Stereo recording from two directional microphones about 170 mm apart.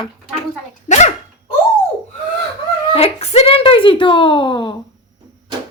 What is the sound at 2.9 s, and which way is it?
Speech, 35° left (ahead or behind).